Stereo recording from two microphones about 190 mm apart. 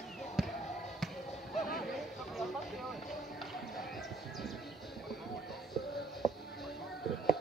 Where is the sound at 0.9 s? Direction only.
Centre (ahead or behind).